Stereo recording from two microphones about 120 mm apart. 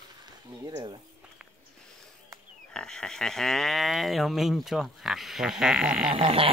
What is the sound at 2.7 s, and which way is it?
Speech, 5° left (ahead or behind).